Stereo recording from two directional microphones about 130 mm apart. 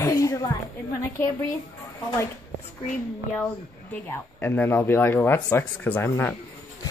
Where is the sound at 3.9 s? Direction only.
15° left (ahead or behind).